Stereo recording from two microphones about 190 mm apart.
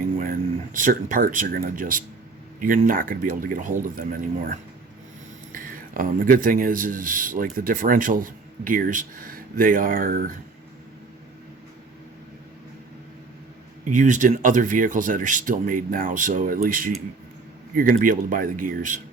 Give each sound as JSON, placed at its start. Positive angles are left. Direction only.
{"t": 0.2, "sound": "speech", "side_deg": -45}
{"t": 13.9, "sound": "speech", "side_deg": -40}